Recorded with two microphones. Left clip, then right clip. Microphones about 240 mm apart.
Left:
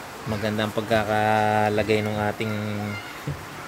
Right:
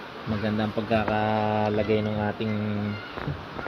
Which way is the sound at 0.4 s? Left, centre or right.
Centre.